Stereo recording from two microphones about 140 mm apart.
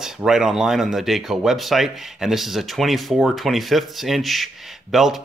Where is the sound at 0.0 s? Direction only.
5° right (ahead or behind).